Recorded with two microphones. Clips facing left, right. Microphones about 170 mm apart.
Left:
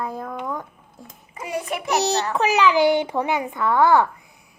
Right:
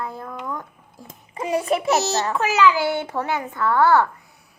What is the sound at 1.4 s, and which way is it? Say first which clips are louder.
Speech: right 6 dB; 30° right (ahead or behind).